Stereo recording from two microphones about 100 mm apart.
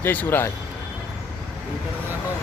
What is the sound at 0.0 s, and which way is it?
Speech, 20° left (ahead or behind).